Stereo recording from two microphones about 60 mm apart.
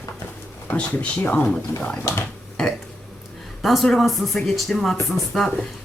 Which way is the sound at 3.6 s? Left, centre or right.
Centre.